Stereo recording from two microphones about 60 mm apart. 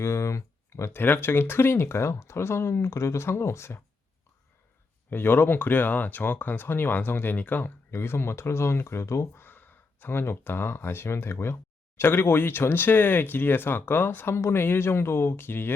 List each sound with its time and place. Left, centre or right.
0.0 s speech: left
1.0 s speech: left
5.1 s speech: left
7.9 s speech: left
9.4 s speech: left